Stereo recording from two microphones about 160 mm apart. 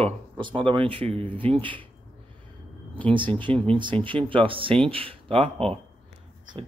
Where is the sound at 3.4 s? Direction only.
10° left (ahead or behind).